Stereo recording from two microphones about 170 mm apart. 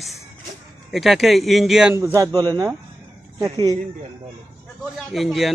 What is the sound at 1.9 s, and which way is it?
Speech, 15° right (ahead or behind).